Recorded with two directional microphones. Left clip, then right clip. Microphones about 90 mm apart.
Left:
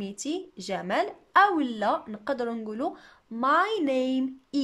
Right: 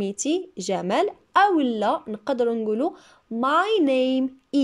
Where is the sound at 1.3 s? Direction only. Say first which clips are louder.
Right 2 dB; 25° right (ahead or behind).